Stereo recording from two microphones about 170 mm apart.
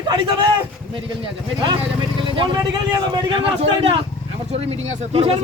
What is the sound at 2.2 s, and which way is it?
Speech, 30° right (ahead or behind).